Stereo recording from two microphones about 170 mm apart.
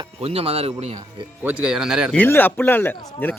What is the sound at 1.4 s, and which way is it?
Speech, 10° right (ahead or behind).